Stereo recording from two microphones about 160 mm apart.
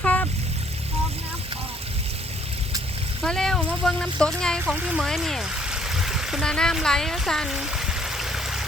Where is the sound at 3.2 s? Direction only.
5° left (ahead or behind).